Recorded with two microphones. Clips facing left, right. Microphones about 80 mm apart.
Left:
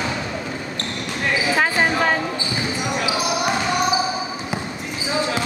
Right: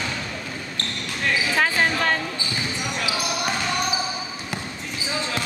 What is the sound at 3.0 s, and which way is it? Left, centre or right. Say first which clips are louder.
Basketball bounce: left 4 dB; centre.